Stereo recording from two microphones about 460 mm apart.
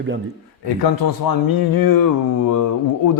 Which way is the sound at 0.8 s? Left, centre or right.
Left.